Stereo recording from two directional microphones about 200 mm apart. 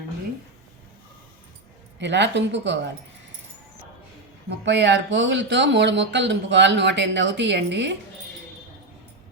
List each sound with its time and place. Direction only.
2.0 s speech: 60° right (ahead or behind)
4.4 s speech: 60° right (ahead or behind)